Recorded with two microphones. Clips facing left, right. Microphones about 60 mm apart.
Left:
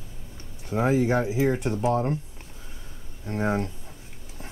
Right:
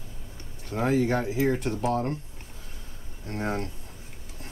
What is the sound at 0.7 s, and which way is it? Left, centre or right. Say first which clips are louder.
Speech: left 2 dB; centre.